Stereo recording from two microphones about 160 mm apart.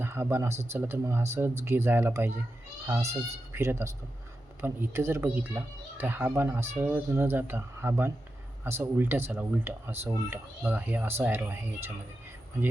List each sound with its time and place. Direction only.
0.0 s speech: 15° right (ahead or behind)